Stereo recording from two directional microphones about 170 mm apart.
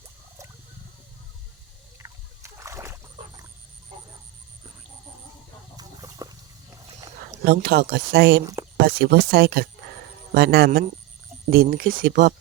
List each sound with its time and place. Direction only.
2.0 s rowboat: 15° right (ahead or behind)
5.7 s a sound: 20° right (ahead or behind)
7.4 s speech: 70° right (ahead or behind)